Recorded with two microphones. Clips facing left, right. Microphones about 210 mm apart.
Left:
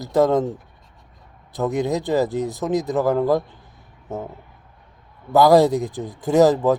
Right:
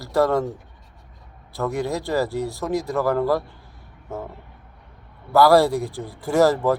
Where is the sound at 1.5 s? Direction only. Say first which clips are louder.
Left 3 dB; 20° left (ahead or behind).